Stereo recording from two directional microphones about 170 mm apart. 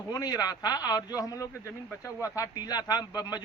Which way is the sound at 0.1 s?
20° left (ahead or behind).